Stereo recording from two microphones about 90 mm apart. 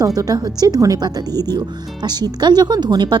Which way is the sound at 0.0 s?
45° right (ahead or behind).